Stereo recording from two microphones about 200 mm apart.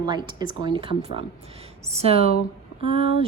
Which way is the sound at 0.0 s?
20° right (ahead or behind).